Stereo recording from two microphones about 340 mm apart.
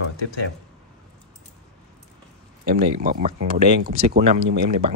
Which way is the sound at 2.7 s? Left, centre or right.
Right.